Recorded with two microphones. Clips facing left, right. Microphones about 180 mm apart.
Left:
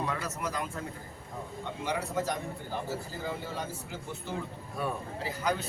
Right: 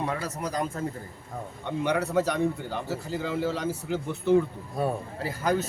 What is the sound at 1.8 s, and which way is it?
Speech, 65° right (ahead or behind).